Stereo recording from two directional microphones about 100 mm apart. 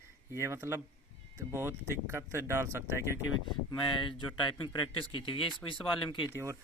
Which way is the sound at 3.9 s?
55° left (ahead or behind).